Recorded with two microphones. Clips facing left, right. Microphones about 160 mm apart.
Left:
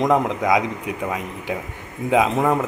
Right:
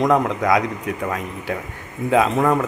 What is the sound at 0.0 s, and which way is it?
A man's voice, 20° left (ahead or behind).